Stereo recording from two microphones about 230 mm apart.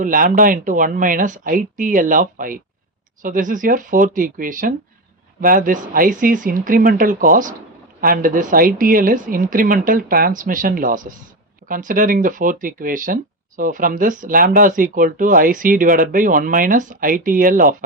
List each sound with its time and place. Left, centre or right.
0.0 s speech: right